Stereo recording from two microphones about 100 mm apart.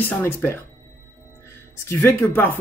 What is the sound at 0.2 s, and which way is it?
Speech, 20° left (ahead or behind).